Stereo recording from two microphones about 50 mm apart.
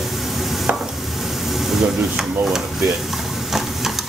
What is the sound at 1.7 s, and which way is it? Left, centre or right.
Stir, centre.